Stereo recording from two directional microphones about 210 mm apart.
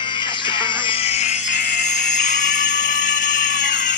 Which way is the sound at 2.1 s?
35° left (ahead or behind).